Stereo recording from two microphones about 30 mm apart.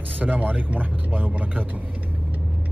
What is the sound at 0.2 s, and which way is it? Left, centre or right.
A man's voice, right.